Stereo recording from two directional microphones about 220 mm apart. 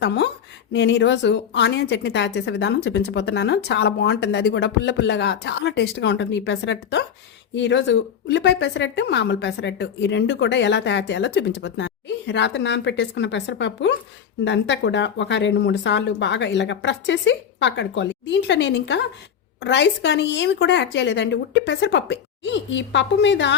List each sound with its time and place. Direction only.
0.7 s a woman's voice: 50° left (ahead or behind)